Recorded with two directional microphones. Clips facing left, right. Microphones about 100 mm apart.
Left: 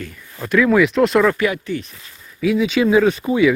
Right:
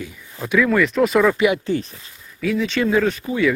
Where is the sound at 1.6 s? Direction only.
35° right (ahead or behind).